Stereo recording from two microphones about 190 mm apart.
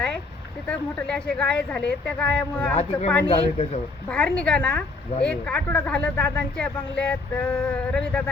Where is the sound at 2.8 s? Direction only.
35° left (ahead or behind).